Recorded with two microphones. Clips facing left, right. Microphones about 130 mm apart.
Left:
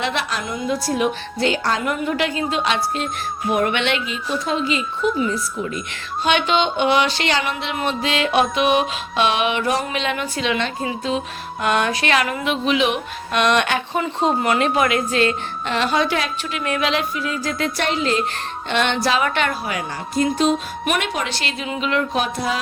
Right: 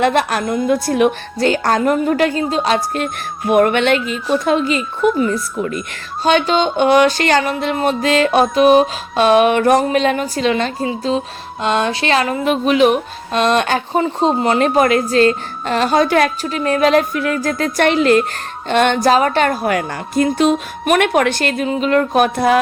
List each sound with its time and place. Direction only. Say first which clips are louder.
0.0 s a woman's voice: right 9 dB; 50° right (ahead or behind)
1.4 s a woman's voice: right 6 dB; 45° right (ahead or behind)
6.2 s a woman's voice: right 4 dB; 40° right (ahead or behind)
12.5 s speech: right 8 dB; 45° right (ahead or behind); by 14.6 s 30° right (ahead or behind)
14.6 s a woman's voice: right 5 dB; 40° right (ahead or behind); by 18.2 s 60° right (ahead or behind)
18.7 s a woman's voice: right 7 dB; 45° right (ahead or behind)